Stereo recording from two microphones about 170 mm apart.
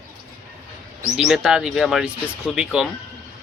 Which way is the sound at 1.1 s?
Centre (ahead or behind).